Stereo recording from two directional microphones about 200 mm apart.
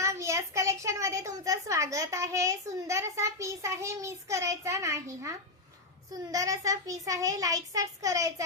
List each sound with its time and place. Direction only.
0.0 s a child's voice: 15° right (ahead or behind)
6.3 s a child's voice: 15° right (ahead or behind)